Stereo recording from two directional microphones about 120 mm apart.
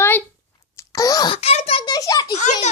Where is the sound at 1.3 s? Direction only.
60° left (ahead or behind).